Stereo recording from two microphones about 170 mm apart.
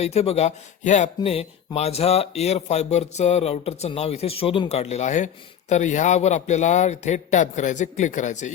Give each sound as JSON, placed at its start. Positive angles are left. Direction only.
{"t": 0.0, "sound": "speech", "side_deg": 40}